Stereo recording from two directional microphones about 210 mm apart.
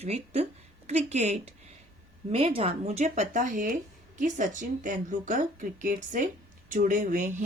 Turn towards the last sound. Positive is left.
turn(degrees=-40)  # may be behind; listen again after turning